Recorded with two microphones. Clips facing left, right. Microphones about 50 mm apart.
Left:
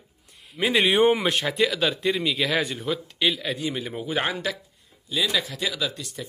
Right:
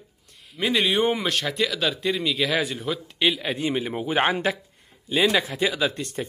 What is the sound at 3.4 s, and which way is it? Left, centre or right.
Speech, right.